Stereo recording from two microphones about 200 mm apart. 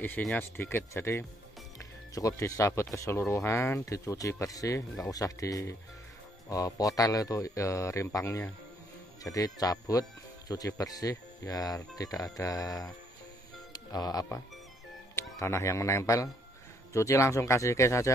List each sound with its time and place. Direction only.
0.0 s speech: 5° left (ahead or behind)